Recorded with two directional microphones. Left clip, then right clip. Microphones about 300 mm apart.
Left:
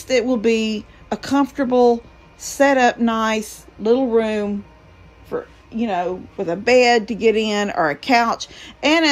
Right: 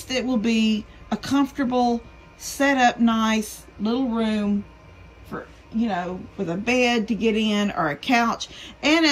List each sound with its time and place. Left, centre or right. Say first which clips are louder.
0.0 s a woman's voice: left 7 dB; centre
5.9 s a woman's voice: left 8 dB; centre
6.7 s speech: left 8 dB; left
7.1 s a woman's voice: left 6 dB; centre